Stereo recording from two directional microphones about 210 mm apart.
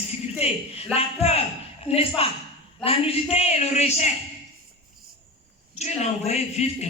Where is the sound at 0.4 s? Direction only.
30° left (ahead or behind).